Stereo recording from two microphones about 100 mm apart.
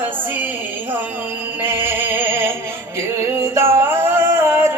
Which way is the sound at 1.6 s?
20° right (ahead or behind).